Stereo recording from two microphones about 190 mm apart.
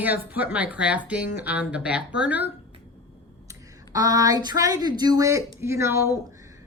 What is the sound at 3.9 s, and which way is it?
A woman's voice, 20° right (ahead or behind).